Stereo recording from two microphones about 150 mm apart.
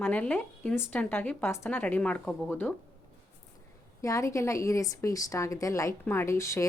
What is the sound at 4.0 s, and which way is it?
A woman's voice, 20° left (ahead or behind).